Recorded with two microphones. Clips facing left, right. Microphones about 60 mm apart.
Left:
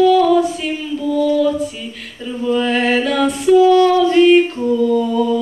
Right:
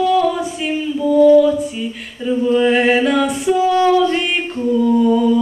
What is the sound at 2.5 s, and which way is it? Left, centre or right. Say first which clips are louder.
Music: right 1 dB; centre.